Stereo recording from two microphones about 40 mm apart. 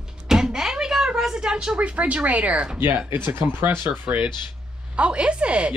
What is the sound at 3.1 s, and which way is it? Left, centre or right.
Speech, right.